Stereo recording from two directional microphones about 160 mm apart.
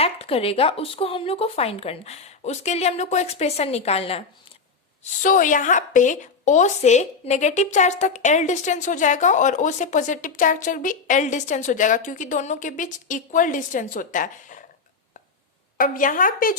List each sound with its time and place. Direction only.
0.0 s speech: 35° left (ahead or behind)
5.2 s a woman's voice: 55° left (ahead or behind)
15.8 s a woman's voice: 55° left (ahead or behind)